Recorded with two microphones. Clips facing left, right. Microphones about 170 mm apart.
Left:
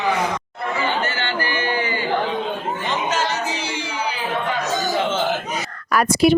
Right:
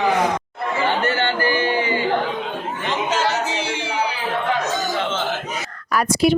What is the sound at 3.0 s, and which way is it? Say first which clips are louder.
Music: right 3 dB; 25° right (ahead or behind).